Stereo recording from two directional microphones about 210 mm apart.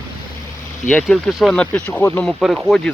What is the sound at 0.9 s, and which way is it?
Speech, centre (ahead or behind).